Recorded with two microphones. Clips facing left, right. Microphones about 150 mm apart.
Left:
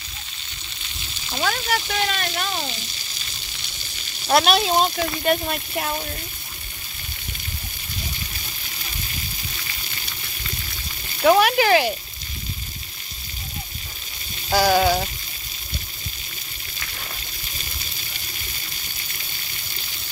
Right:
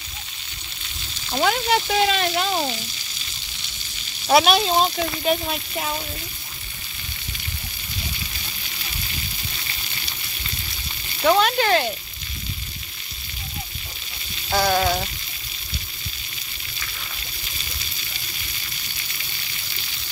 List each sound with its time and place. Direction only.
1.4 s speech: 20° right (ahead or behind)
4.3 s speech: centre (ahead or behind)
11.2 s speech: 5° left (ahead or behind)
14.5 s frying: 5° left (ahead or behind)